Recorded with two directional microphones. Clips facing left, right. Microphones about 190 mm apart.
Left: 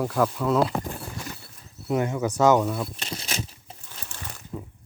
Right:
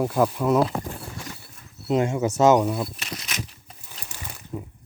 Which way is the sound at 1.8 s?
25° right (ahead or behind).